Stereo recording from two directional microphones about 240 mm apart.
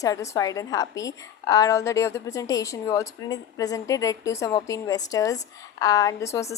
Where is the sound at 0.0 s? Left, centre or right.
Centre.